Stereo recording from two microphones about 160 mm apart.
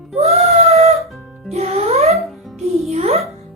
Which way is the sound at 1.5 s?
40° right (ahead or behind).